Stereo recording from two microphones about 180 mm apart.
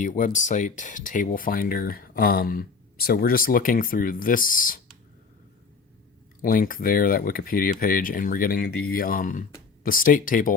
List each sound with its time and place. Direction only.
0.0 s speech: 45° left (ahead or behind)
6.4 s speech: 50° left (ahead or behind)